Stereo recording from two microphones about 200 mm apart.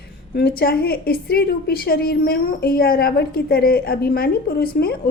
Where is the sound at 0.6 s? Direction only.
50° left (ahead or behind).